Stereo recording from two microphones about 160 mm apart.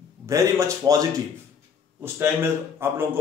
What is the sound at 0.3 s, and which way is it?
A man's voice, 20° right (ahead or behind).